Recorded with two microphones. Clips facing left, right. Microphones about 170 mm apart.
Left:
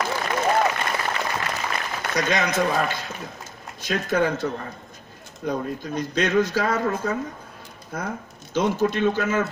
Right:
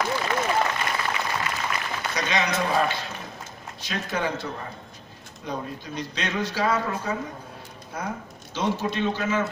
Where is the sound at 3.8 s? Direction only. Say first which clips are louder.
Left 6 dB; 45° left (ahead or behind).